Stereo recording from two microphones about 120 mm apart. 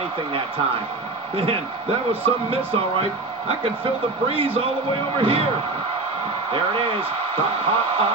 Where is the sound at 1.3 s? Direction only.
50° right (ahead or behind).